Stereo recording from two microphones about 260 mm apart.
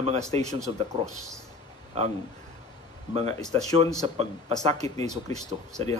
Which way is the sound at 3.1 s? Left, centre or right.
Right.